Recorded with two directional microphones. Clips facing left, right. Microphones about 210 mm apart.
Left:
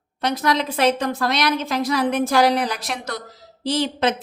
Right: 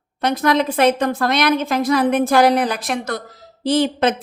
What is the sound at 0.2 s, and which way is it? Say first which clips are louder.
A woman's voice: right 4 dB; 55° right (ahead or behind).